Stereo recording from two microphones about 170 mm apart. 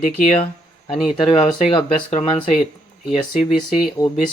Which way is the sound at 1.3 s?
30° left (ahead or behind).